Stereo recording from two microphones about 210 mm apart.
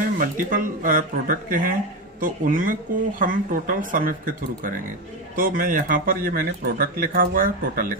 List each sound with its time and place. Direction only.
0.2 s speech: 40° right (ahead or behind)
5.3 s speech: 40° right (ahead or behind)